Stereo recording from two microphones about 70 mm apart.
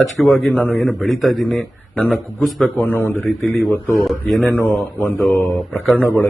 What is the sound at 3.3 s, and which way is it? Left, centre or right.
A man's voice, centre.